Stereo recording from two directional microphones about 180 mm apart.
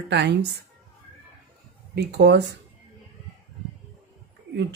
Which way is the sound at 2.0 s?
70° right (ahead or behind).